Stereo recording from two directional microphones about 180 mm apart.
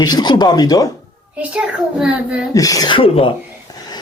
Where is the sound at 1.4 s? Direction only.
5° right (ahead or behind).